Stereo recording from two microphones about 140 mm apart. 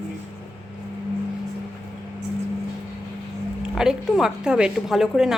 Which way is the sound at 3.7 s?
5° right (ahead or behind).